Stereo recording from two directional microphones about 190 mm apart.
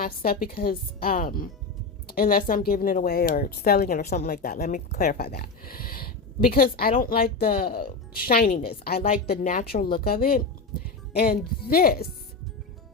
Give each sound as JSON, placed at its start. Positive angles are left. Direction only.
{"t": 0.0, "sound": "speech", "side_deg": 50}